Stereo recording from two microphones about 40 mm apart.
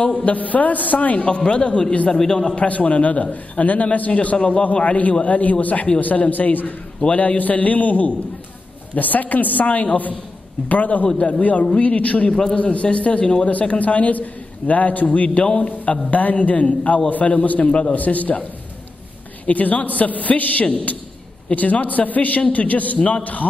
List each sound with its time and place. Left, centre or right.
0.2 s a man's voice: left; by 2.5 s centre
2.5 s a man's voice: left
7.0 s a man's voice: left
11.1 s a man's voice: left
11.8 s a man's voice: left
12.3 s a man's voice: centre
12.5 s a man's voice: left
13.5 s a man's voice: left
17.9 s a man's voice: left
19.4 s a man's voice: left